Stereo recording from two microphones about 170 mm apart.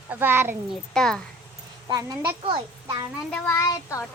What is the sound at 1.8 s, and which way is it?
Speech, 20° right (ahead or behind).